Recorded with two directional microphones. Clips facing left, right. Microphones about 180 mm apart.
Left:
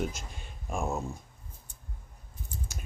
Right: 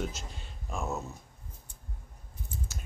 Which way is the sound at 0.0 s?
15° left (ahead or behind).